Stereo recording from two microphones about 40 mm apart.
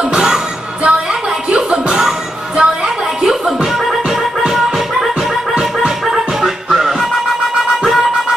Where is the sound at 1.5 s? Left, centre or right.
Centre.